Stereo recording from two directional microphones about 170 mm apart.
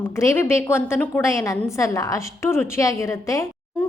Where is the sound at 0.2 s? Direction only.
15° left (ahead or behind).